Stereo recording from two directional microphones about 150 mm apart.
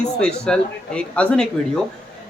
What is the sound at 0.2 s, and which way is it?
Speech, 5° left (ahead or behind).